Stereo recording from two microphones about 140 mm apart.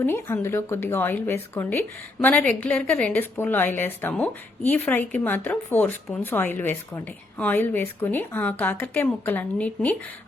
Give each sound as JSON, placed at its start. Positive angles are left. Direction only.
{"t": 0.0, "sound": "a woman's voice", "side_deg": 15}